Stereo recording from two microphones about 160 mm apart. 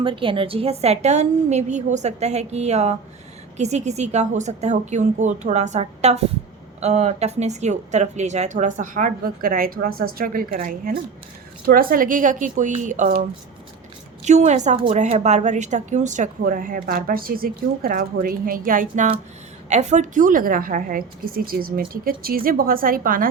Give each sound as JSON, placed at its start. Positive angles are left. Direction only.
{"t": 0.0, "sound": "a woman's voice", "side_deg": -30}
{"t": 14.3, "sound": "a woman's voice", "side_deg": -45}
{"t": 19.7, "sound": "a woman's voice", "side_deg": -45}